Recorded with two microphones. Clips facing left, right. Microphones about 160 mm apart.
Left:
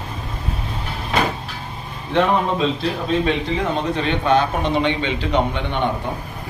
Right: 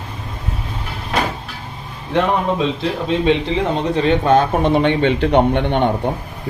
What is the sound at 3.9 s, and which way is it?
A man's voice, 40° right (ahead or behind).